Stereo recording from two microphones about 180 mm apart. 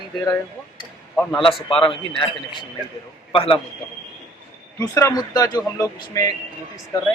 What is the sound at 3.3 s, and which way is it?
Speech, 30° left (ahead or behind).